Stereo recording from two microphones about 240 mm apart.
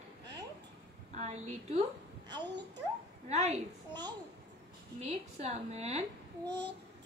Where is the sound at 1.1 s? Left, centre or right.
Right.